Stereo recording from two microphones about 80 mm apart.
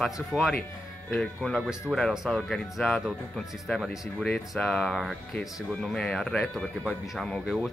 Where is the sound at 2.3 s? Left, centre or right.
Centre.